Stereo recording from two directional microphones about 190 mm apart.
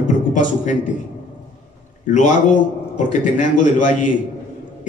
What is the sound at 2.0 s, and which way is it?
A man's voice, 40° left (ahead or behind).